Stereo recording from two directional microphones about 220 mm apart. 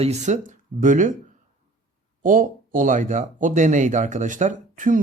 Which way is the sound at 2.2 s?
40° right (ahead or behind).